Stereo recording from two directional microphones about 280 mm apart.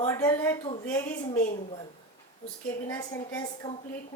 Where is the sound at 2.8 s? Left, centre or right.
Centre.